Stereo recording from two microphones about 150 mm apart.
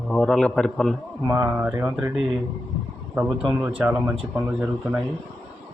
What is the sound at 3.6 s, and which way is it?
Speech, 10° right (ahead or behind).